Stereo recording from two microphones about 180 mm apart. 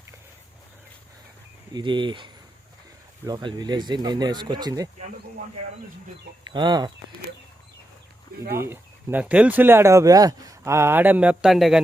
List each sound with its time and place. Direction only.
1.7 s speech: 25° right (ahead or behind)
6.5 s speech: 25° right (ahead or behind)
8.5 s speech: 15° right (ahead or behind)